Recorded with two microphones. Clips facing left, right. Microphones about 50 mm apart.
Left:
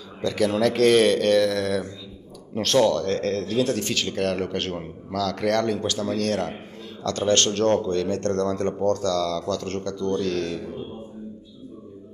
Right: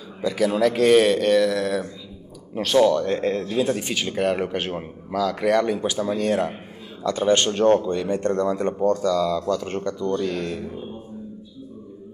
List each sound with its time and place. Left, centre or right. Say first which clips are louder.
0.2 s speech: right 1 dB; centre